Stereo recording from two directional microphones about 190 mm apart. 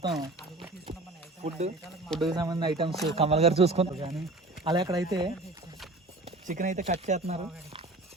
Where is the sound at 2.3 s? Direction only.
20° right (ahead or behind).